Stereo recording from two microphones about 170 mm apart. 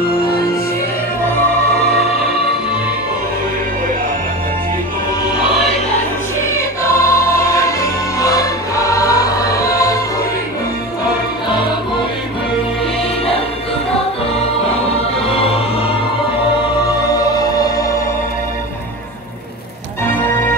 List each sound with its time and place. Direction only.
5.3 s music: 30° left (ahead or behind)
6.5 s music: 15° left (ahead or behind)
17.1 s music: 20° left (ahead or behind)